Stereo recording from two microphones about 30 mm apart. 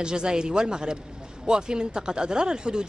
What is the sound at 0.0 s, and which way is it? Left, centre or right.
Speech, right.